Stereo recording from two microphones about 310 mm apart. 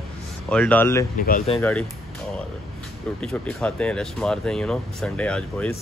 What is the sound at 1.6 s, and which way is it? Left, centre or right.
Speech, centre.